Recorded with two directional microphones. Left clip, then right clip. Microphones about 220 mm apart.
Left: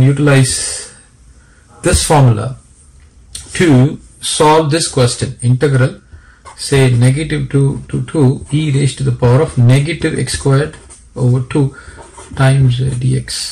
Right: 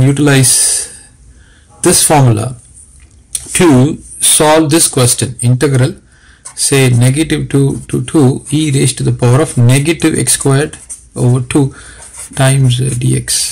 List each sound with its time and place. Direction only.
0.0 s speech: 45° right (ahead or behind)
1.8 s speech: 40° right (ahead or behind)
3.5 s speech: 40° right (ahead or behind)